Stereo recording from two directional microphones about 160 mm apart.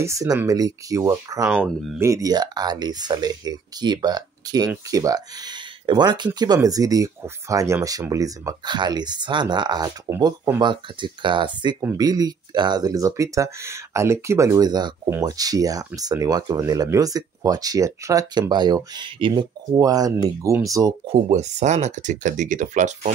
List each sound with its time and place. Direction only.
0.0 s speech: 20° right (ahead or behind)
1.5 s speech: centre (ahead or behind)
2.0 s speech: 20° right (ahead or behind)
21.3 s speech: 45° right (ahead or behind)